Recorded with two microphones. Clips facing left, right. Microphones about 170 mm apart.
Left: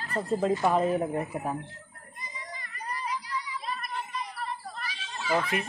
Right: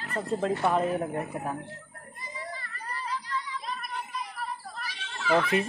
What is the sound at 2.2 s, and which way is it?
Child singing, 15° left (ahead or behind).